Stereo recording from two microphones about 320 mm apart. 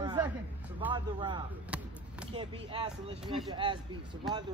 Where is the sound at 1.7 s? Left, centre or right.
Centre.